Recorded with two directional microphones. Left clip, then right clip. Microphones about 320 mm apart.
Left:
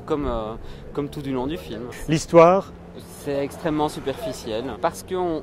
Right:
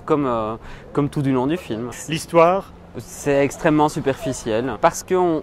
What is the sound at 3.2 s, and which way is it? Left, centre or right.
Speech, right.